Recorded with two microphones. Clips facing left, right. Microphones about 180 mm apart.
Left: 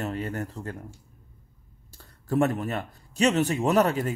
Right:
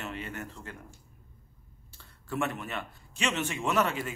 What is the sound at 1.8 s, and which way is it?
Speech, 40° left (ahead or behind).